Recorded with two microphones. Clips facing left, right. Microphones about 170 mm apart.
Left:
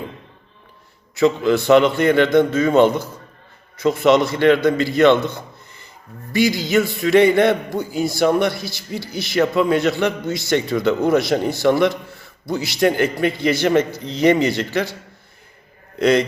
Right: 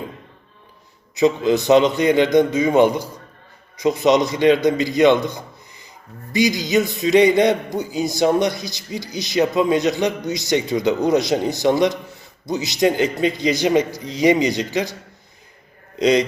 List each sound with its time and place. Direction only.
1.1 s a man's voice: 20° right (ahead or behind)
16.0 s a man's voice: 15° right (ahead or behind)